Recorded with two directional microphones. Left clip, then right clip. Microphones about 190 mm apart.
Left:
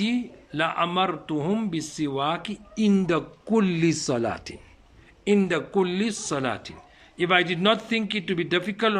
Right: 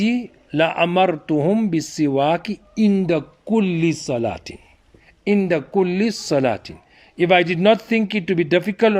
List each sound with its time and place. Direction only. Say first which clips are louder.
0.0 s speech: right 5 dB; 35° right (ahead or behind); by 4.5 s 15° right (ahead or behind)
5.2 s a man's voice: right 4 dB; 30° right (ahead or behind)